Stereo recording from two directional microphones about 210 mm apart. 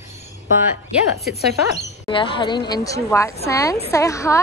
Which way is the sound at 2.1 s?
20° left (ahead or behind).